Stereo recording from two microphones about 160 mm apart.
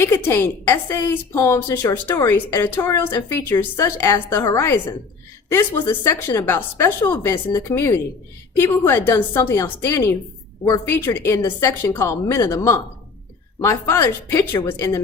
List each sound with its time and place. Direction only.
0.3 s a woman's voice: 15° left (ahead or behind)